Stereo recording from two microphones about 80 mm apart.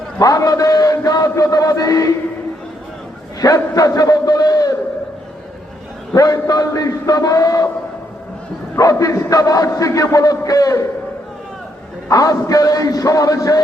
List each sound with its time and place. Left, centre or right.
0.2 s a man's voice: left
3.4 s a man's voice: left
6.1 s a man's voice: left
8.7 s a man's voice: left
12.0 s a man's voice: left